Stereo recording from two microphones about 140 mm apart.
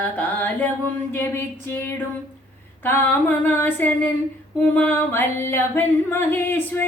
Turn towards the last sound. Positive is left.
turn(degrees=15)  # may be behind; listen again after turning